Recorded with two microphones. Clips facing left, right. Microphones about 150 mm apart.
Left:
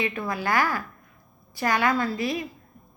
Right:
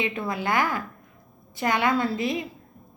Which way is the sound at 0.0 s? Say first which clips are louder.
Even; 20° right (ahead or behind).